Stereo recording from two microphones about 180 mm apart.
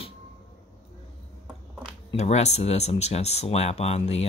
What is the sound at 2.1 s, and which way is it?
Speech, 40° left (ahead or behind).